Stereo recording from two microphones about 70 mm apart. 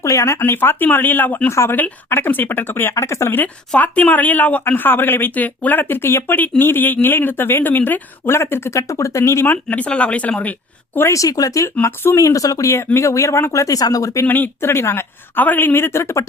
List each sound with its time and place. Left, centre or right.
0.0 s speech: left
1.5 s speech: left
1.7 s speech: left
3.8 s speech: left
9.5 s speech: left
11.1 s speech: left
12.2 s speech: left
14.3 s speech: left